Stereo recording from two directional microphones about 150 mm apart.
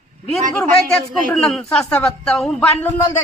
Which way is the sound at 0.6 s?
5° left (ahead or behind).